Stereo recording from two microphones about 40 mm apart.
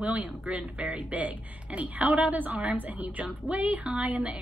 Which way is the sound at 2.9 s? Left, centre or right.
Right.